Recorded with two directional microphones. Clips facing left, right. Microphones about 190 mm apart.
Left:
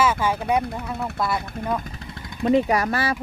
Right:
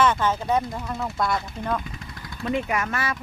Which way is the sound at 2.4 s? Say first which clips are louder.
Left 7 dB; 35° left (ahead or behind).